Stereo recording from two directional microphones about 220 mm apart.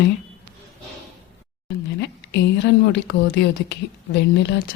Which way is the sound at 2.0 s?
50° left (ahead or behind).